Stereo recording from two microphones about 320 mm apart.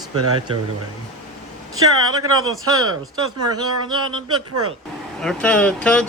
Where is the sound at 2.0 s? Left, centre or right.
Right.